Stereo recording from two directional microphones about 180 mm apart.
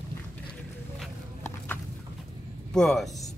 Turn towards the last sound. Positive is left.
turn(degrees=0)  # may be behind; listen again after turning